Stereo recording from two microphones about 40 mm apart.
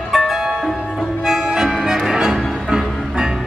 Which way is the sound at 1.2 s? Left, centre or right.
Centre.